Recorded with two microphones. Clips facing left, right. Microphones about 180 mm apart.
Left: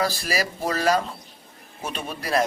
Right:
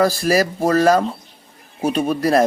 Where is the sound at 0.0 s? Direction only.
45° right (ahead or behind).